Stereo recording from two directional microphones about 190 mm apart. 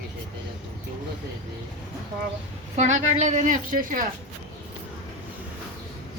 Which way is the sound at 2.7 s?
40° right (ahead or behind).